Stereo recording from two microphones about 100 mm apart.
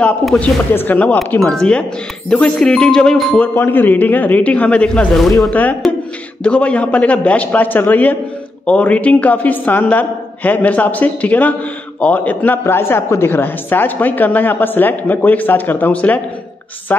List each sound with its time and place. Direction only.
0.4 s a man's voice: 15° left (ahead or behind)
3.5 s a man's voice: 20° left (ahead or behind); by 5.3 s 5° left (ahead or behind)
5.5 s a man's voice: 15° left (ahead or behind)